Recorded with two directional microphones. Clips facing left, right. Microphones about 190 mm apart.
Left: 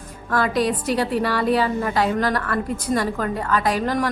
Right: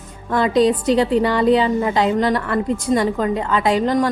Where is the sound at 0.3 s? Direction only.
20° right (ahead or behind).